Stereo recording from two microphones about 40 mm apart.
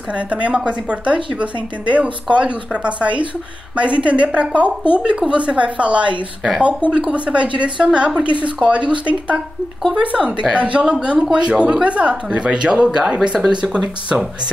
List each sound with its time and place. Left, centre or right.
0.1 s speech: right